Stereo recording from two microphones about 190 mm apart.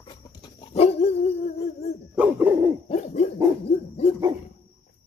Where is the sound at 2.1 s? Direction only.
10° right (ahead or behind).